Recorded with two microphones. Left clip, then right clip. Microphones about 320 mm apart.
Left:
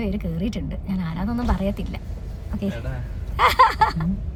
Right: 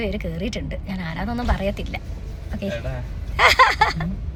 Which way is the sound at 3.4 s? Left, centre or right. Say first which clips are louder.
Right 1 dB; centre.